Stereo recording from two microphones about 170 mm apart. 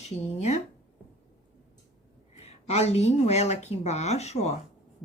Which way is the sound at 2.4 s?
40° left (ahead or behind).